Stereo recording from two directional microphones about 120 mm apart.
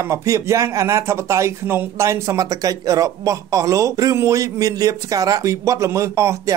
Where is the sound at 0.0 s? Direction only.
25° right (ahead or behind).